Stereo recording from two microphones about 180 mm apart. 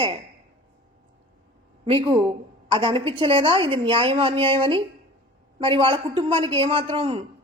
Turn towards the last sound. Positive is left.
turn(degrees=-30)  # may be behind; listen again after turning